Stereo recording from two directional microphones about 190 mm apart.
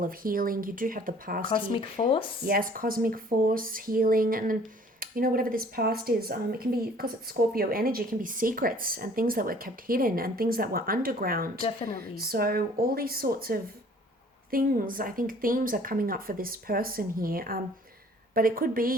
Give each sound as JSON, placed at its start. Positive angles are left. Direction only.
{"t": 0.0, "sound": "speech", "side_deg": -50}
{"t": 1.6, "sound": "speech", "side_deg": 25}
{"t": 2.4, "sound": "speech", "side_deg": -50}
{"t": 11.6, "sound": "a woman's voice", "side_deg": 30}
{"t": 11.9, "sound": "speech", "side_deg": -50}